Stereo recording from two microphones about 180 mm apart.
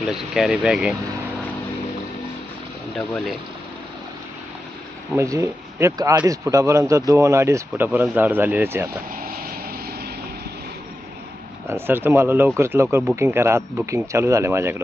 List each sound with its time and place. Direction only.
0.0 s speech: centre (ahead or behind)
5.1 s speech: 15° right (ahead or behind)
11.7 s speech: 10° right (ahead or behind)